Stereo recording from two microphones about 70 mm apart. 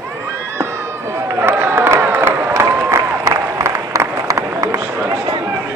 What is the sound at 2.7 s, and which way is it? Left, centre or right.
Applause, right.